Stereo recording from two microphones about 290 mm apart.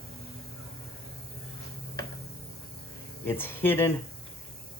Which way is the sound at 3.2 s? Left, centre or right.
Centre.